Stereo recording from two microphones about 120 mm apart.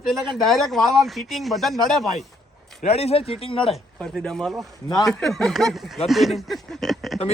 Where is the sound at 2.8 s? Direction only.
60° left (ahead or behind).